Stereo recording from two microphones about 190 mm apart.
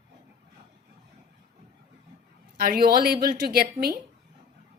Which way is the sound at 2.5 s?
55° right (ahead or behind).